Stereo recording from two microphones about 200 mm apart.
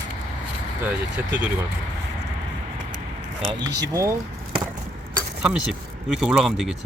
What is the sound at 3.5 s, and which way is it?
Speech, 15° right (ahead or behind).